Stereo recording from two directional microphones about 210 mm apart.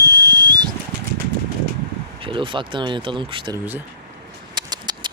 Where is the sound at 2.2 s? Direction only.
25° right (ahead or behind).